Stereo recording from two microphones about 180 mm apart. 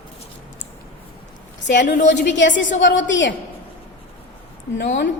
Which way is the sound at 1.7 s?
75° left (ahead or behind).